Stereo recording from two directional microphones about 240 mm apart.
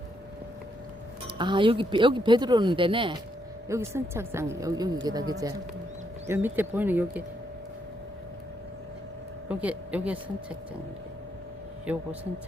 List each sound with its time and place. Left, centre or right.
1.4 s speech: centre
3.7 s a woman's voice: centre
9.5 s speech: centre
11.9 s a woman's voice: centre